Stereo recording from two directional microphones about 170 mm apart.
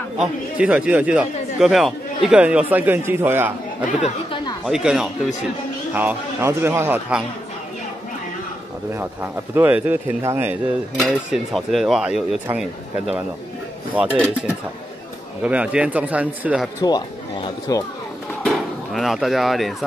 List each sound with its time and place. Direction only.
0.2 s speech: 5° right (ahead or behind)
4.6 s speech: 5° right (ahead or behind)
8.9 s speech: 15° right (ahead or behind)
11.0 s speech: centre (ahead or behind)
15.4 s speech: 5° right (ahead or behind)
16.8 s speech: 25° left (ahead or behind)
18.9 s speech: centre (ahead or behind)